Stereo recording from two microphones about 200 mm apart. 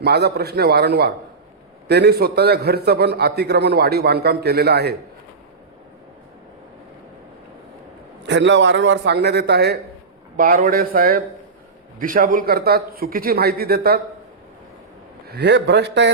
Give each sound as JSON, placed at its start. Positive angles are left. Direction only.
{"t": 0.0, "sound": "a man's voice", "side_deg": -55}
{"t": 8.2, "sound": "a man's voice", "side_deg": -65}
{"t": 10.3, "sound": "a man's voice", "side_deg": -45}
{"t": 15.3, "sound": "a man's voice", "side_deg": -60}